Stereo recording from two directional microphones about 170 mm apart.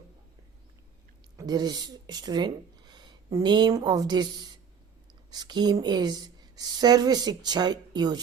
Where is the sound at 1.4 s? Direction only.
25° right (ahead or behind).